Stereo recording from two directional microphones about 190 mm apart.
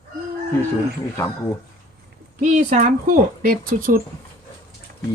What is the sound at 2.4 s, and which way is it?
Speech, 40° right (ahead or behind).